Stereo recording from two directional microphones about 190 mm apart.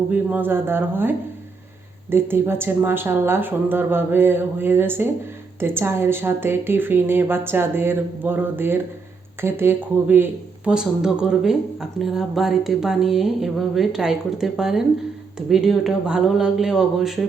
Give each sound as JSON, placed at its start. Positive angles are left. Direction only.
{"t": 0.1, "sound": "a woman's voice", "side_deg": -10}